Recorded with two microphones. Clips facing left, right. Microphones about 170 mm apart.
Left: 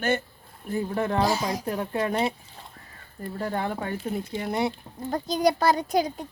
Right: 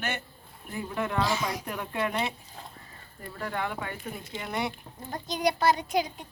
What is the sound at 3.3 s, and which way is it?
Speech, 35° left (ahead or behind).